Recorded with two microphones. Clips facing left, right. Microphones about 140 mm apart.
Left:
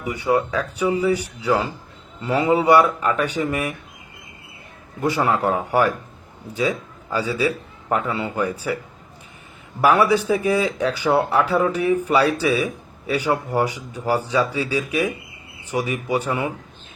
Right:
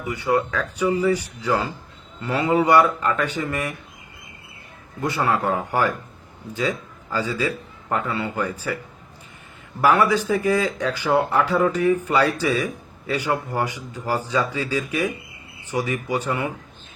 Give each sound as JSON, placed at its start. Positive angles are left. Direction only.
{"t": 0.0, "sound": "speech", "side_deg": 10}
{"t": 4.9, "sound": "a man's voice", "side_deg": 10}
{"t": 9.8, "sound": "speech", "side_deg": 10}